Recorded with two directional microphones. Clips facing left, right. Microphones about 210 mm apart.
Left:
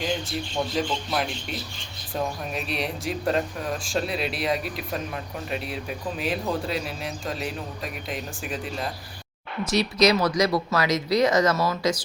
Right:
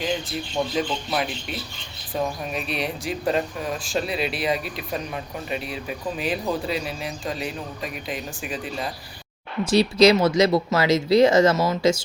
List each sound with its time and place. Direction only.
0.0 s speech: centre (ahead or behind)
9.6 s speech: 30° right (ahead or behind)